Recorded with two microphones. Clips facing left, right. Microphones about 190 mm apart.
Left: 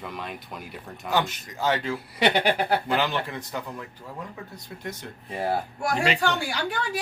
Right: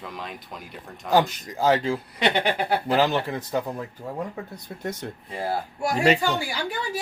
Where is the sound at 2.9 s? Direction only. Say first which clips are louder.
Right 4 dB; 40° right (ahead or behind).